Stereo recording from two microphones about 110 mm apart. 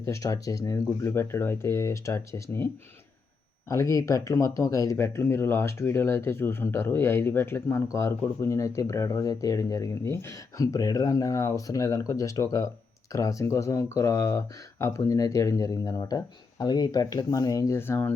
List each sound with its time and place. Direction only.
0.2 s speech: 30° left (ahead or behind)
3.7 s speech: 30° left (ahead or behind)